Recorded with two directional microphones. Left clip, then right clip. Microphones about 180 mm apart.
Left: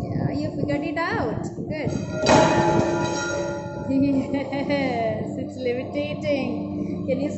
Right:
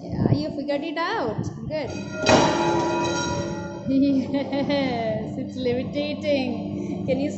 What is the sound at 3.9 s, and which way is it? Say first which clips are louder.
A woman's voice: right 1 dB; 20° right (ahead or behind).